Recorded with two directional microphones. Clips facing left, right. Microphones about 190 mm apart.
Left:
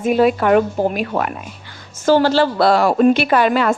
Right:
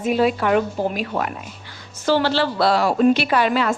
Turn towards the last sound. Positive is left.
turn(degrees=50)  # may be behind; listen again after turning